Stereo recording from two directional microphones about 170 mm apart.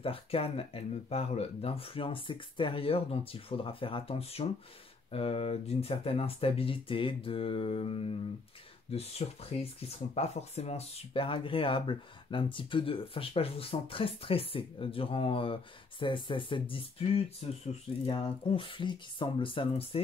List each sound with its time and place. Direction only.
0.0 s speech: 35° left (ahead or behind)